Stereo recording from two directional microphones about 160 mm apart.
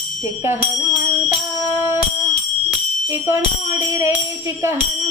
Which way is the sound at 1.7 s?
15° right (ahead or behind).